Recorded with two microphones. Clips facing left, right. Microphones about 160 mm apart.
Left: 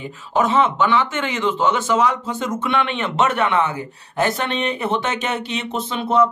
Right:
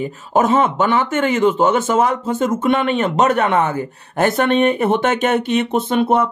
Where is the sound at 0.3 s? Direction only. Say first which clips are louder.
Right 2 dB; 45° right (ahead or behind).